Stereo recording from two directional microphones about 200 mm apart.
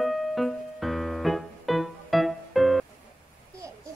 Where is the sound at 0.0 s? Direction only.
Centre (ahead or behind).